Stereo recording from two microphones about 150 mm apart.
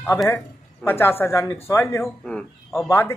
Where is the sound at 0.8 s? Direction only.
15° left (ahead or behind).